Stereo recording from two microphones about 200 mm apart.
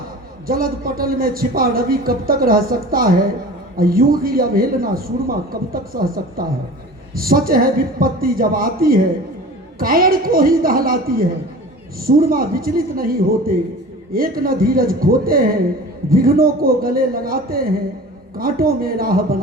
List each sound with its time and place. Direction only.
0.4 s a man's voice: 45° right (ahead or behind)